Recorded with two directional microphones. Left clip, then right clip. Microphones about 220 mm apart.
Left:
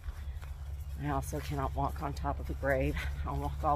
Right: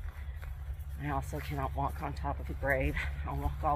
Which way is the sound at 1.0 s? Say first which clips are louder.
Left 1 dB; 15° left (ahead or behind).